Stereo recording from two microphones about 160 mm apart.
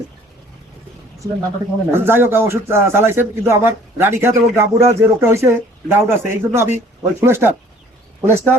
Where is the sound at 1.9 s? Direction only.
15° right (ahead or behind).